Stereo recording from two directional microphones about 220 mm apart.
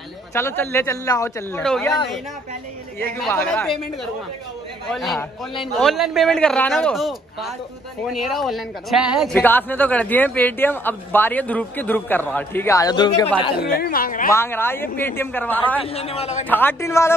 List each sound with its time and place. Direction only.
0.3 s speech: 10° left (ahead or behind)
1.6 s a man's voice: 5° left (ahead or behind)
3.0 s a man's voice: 10° left (ahead or behind)
13.6 s a woman's voice: 45° left (ahead or behind)
14.3 s speech: 10° left (ahead or behind)
15.8 s a man's voice: 25° left (ahead or behind)
16.4 s speech: 10° left (ahead or behind)